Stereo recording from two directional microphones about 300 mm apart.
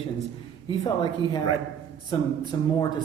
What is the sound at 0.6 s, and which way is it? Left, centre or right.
Speech, centre.